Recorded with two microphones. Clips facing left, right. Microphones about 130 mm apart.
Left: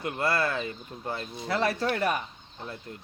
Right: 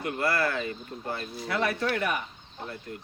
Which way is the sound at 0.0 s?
25° left (ahead or behind).